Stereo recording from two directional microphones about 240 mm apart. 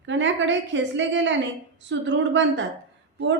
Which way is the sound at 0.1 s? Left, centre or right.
Right.